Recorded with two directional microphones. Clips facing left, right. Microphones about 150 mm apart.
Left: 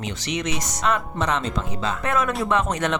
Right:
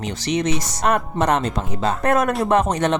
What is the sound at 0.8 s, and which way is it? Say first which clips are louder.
Speech: right 4 dB; 50° right (ahead or behind).